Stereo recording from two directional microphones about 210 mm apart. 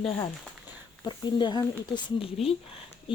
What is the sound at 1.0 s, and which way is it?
Speech, 20° left (ahead or behind).